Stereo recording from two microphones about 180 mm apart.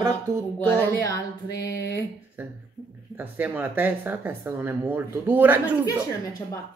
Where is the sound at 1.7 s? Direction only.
65° left (ahead or behind).